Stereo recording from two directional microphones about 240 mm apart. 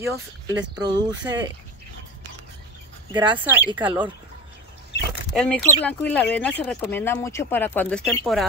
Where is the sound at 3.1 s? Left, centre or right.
Centre.